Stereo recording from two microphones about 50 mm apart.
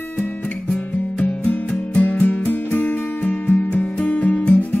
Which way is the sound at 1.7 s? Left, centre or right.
Left.